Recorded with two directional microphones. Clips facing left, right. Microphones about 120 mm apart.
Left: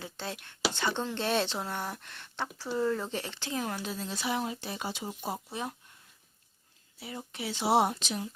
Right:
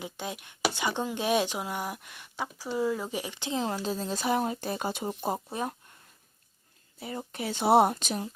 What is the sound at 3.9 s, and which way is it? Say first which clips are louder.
A woman's voice: right 5 dB; 40° right (ahead or behind).